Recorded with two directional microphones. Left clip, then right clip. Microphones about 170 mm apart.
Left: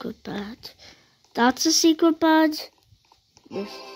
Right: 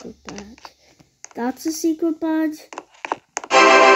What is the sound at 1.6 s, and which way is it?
Speech, 60° left (ahead or behind).